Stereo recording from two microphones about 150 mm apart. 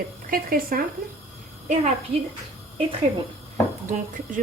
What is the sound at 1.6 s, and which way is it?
Speech, 55° right (ahead or behind).